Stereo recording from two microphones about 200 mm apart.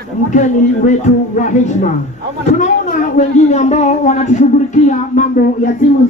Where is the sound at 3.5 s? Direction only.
35° left (ahead or behind).